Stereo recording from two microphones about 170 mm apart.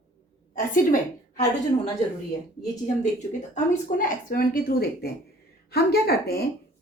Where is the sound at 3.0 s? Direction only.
45° left (ahead or behind).